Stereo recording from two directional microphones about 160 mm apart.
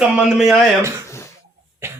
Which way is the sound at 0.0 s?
5° right (ahead or behind).